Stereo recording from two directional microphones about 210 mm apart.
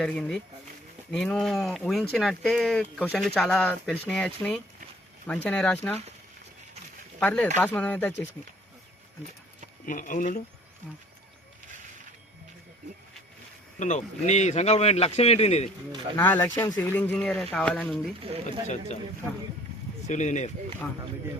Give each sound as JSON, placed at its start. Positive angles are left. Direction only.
{"t": 0.0, "sound": "speech", "side_deg": 5}
{"t": 7.2, "sound": "speech", "side_deg": 5}
{"t": 9.8, "sound": "speech", "side_deg": 40}
{"t": 13.7, "sound": "speech", "side_deg": 35}
{"t": 16.1, "sound": "speech", "side_deg": 10}
{"t": 18.4, "sound": "speech", "side_deg": 35}
{"t": 20.1, "sound": "speech", "side_deg": 35}